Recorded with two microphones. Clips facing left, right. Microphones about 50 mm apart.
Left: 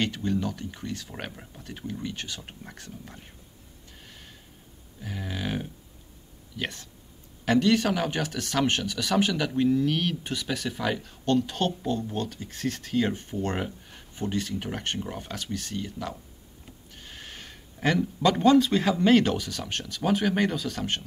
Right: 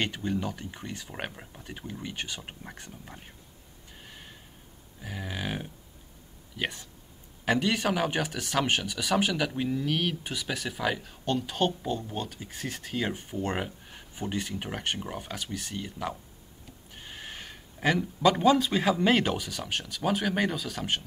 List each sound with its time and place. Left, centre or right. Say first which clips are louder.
0.0 s speech: left 3 dB; centre
4.0 s gasp: right 2 dB; centre
5.0 s speech: left 2 dB; centre
16.9 s a sound: right 2 dB; centre
19.0 s speech: left 4 dB; centre